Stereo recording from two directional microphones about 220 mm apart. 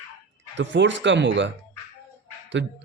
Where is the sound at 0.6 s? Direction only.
55° right (ahead or behind).